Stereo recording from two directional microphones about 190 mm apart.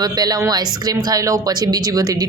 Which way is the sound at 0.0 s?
20° right (ahead or behind).